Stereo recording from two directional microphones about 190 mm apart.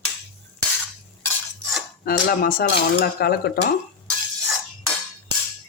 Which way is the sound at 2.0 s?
50° left (ahead or behind).